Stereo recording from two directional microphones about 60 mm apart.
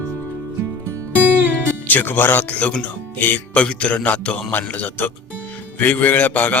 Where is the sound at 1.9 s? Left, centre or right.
Left.